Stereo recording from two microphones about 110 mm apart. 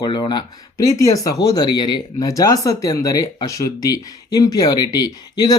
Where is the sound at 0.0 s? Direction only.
40° left (ahead or behind).